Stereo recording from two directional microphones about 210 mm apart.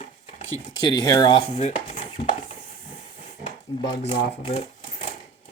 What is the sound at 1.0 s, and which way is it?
Dishes, 20° left (ahead or behind).